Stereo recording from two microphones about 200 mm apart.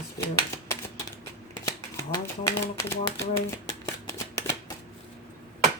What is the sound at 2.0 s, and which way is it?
Speech, 15° left (ahead or behind).